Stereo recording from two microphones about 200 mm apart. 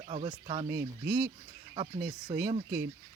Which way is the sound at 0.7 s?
15° right (ahead or behind).